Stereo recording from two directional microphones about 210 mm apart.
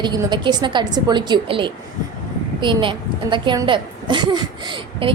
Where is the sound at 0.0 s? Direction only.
20° right (ahead or behind).